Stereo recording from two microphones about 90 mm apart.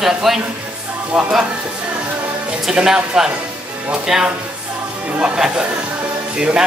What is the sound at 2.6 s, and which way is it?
Speech, 5° right (ahead or behind).